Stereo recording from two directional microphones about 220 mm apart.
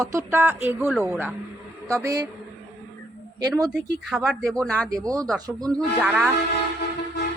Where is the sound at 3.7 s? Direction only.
Centre (ahead or behind).